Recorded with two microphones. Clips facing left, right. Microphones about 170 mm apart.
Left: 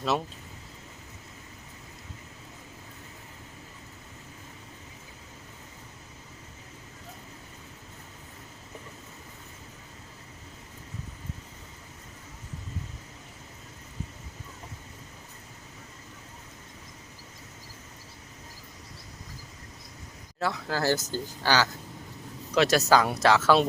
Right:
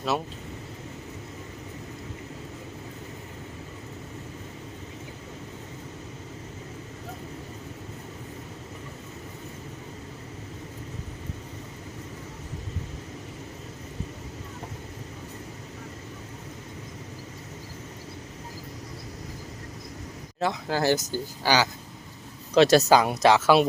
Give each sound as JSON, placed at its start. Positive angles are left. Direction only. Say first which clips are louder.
{"t": 20.4, "sound": "speech", "louder": "right 3 dB", "side_deg": -20}
{"t": 22.5, "sound": "speech", "louder": "right 6 dB", "side_deg": -30}
{"t": 22.9, "sound": "speech", "louder": "right 3 dB", "side_deg": -15}